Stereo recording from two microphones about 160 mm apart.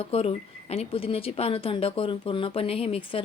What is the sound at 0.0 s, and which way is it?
Speech, 35° left (ahead or behind).